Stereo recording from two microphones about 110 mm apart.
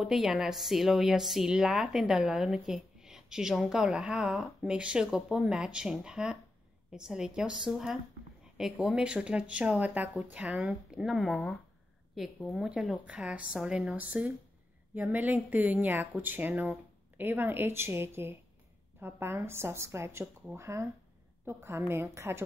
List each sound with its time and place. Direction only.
0.0 s a woman's voice: 5° right (ahead or behind); by 22.4 s 25° right (ahead or behind)